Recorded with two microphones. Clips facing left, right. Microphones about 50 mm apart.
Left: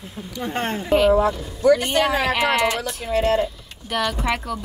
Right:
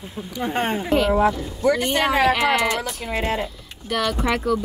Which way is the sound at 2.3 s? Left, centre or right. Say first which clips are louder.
Even; centre.